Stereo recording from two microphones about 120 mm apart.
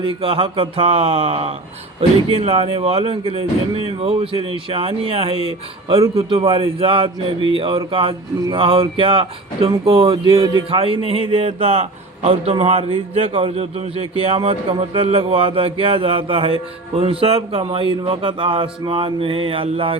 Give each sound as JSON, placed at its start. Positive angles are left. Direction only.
{"t": 0.0, "sound": "a man's voice", "side_deg": -50}
{"t": 10.3, "sound": "a man's voice", "side_deg": -35}
{"t": 10.7, "sound": "a man's voice", "side_deg": -50}